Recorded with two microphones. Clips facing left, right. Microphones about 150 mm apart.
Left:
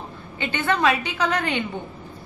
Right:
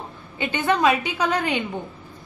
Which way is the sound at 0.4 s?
15° right (ahead or behind).